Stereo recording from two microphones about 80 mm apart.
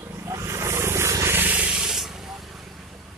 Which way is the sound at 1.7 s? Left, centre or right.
Centre.